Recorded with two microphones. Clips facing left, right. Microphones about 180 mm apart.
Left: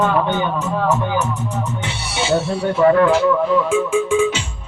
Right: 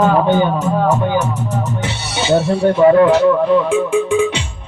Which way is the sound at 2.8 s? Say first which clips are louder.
Right 3 dB; 20° right (ahead or behind).